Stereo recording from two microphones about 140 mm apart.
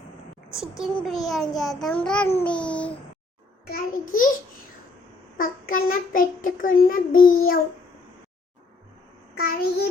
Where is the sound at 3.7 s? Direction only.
75° left (ahead or behind).